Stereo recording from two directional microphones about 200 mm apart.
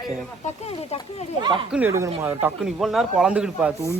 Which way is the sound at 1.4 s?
25° right (ahead or behind).